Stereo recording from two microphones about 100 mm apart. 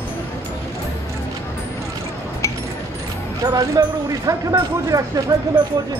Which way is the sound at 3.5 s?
40° right (ahead or behind).